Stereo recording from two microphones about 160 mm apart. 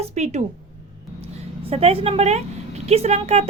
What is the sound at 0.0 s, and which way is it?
A woman's voice, 45° right (ahead or behind).